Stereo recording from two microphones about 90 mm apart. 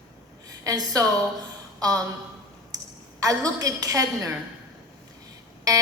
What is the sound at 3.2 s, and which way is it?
A woman's voice, 40° right (ahead or behind).